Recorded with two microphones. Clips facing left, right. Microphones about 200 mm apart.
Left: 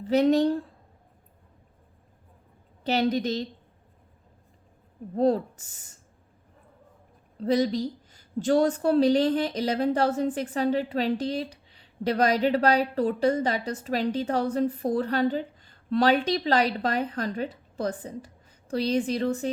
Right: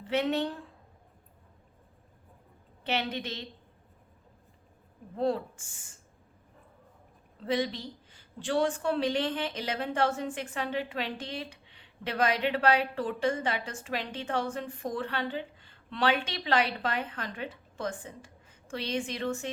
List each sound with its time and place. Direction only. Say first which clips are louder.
0.0 s a woman's voice: left 8 dB; 35° left (ahead or behind)
2.8 s a woman's voice: left 8 dB; 35° left (ahead or behind)
5.1 s a woman's voice: left 6 dB; 40° left (ahead or behind)
7.3 s a woman's voice: left 7 dB; 40° left (ahead or behind)